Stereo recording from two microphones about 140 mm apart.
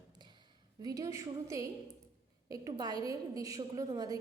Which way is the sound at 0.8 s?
25° right (ahead or behind).